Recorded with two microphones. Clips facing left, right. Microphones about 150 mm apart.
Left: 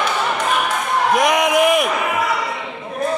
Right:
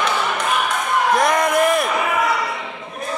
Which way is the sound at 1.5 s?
10° left (ahead or behind).